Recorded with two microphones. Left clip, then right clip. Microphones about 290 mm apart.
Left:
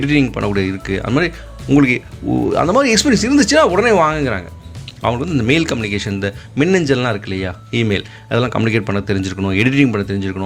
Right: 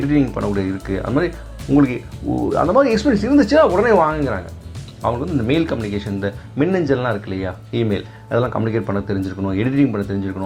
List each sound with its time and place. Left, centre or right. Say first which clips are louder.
0.1 s speech: left 3 dB; left